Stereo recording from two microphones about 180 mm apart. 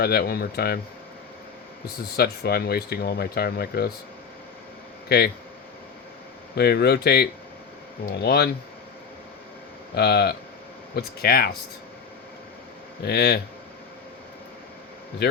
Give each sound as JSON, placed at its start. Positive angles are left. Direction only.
{"t": 0.0, "sound": "speech", "side_deg": 60}
{"t": 2.1, "sound": "speech", "side_deg": 60}
{"t": 5.0, "sound": "speech", "side_deg": 60}
{"t": 6.6, "sound": "speech", "side_deg": 65}
{"t": 9.9, "sound": "speech", "side_deg": 65}
{"t": 13.1, "sound": "speech", "side_deg": 65}
{"t": 15.2, "sound": "a man's voice", "side_deg": 65}